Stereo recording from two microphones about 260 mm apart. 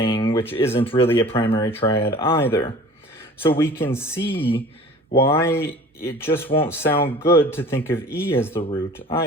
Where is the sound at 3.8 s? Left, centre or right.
Centre.